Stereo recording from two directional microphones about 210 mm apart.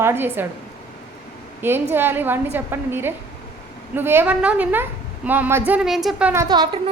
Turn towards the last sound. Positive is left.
turn(degrees=-20)  # may be behind; listen again after turning